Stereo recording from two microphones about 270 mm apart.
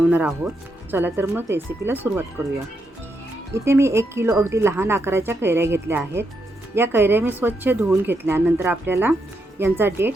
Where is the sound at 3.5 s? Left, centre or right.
Centre.